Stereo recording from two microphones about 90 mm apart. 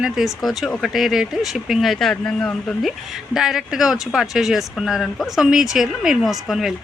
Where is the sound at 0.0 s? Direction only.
5° right (ahead or behind).